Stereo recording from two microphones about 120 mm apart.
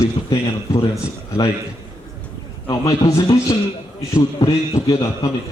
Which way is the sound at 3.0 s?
25° left (ahead or behind).